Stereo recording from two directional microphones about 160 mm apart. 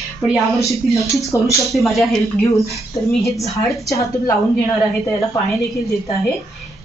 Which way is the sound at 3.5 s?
20° left (ahead or behind).